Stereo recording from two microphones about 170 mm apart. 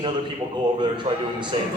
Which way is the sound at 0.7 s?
25° right (ahead or behind).